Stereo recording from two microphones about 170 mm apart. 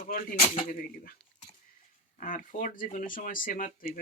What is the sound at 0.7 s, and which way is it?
Speech, 55° left (ahead or behind).